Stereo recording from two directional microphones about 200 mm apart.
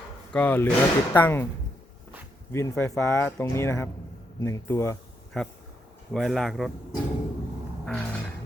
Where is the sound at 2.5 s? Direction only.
15° left (ahead or behind).